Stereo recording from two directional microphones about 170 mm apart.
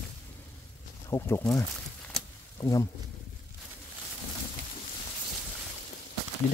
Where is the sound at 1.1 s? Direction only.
10° left (ahead or behind).